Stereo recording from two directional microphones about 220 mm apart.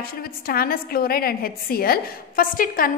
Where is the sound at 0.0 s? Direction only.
40° left (ahead or behind).